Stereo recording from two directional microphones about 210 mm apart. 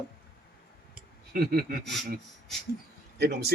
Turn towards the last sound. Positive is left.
turn(degrees=-50)  # may be behind; listen again after turning